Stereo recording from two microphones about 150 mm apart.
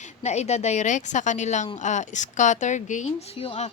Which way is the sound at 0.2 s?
50° left (ahead or behind).